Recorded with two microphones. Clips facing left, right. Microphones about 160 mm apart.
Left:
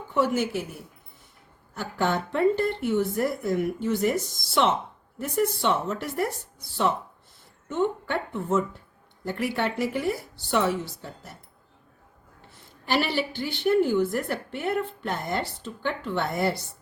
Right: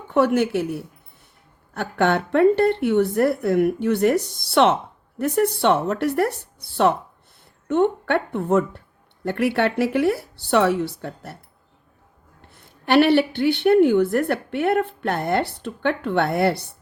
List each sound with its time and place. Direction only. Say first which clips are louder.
0.1 s a woman's voice: right 6 dB; 65° right (ahead or behind)
12.8 s a woman's voice: right 10 dB; 65° right (ahead or behind)